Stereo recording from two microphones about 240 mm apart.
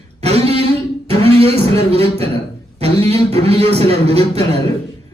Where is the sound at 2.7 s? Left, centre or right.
Right.